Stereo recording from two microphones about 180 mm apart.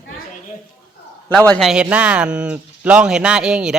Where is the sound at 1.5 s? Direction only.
Centre (ahead or behind).